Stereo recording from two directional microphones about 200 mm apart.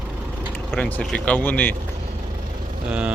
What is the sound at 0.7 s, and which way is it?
Speech, 5° left (ahead or behind).